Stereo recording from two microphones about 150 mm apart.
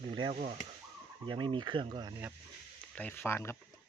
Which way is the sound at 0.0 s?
35° right (ahead or behind).